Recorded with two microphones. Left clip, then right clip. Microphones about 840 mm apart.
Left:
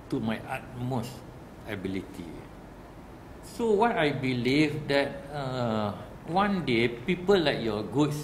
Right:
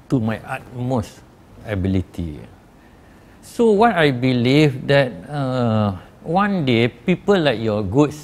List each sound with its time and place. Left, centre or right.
0.1 s speech: right
3.5 s speech: right